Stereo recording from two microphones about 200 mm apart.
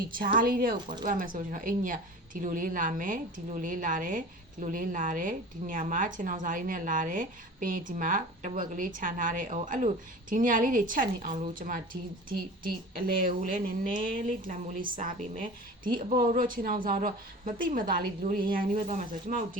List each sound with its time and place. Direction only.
0.3 s speech: 45° right (ahead or behind)